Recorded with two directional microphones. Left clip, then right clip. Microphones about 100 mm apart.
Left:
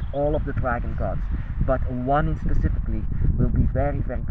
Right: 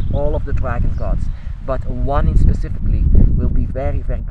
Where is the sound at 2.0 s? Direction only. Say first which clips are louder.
Right 1 dB; 30° right (ahead or behind).